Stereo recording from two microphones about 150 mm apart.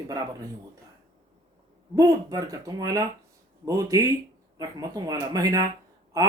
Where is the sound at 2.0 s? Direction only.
20° right (ahead or behind).